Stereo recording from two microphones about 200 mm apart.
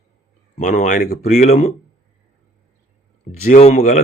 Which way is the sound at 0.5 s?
35° left (ahead or behind).